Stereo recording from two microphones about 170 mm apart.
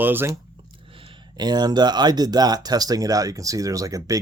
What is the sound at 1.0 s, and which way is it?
Speech, 25° right (ahead or behind).